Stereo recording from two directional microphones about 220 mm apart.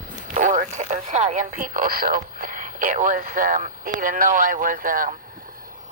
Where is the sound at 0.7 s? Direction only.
35° right (ahead or behind).